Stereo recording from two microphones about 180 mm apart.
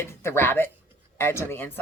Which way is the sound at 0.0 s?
15° left (ahead or behind).